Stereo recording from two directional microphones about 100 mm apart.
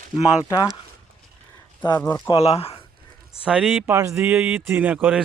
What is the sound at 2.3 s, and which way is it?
Speech, 85° left.